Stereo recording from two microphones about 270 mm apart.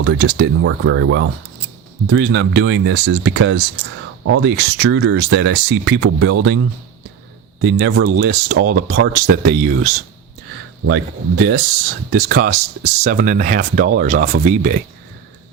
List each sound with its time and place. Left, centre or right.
0.0 s speech: right